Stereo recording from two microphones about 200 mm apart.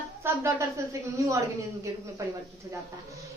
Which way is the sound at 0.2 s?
10° right (ahead or behind).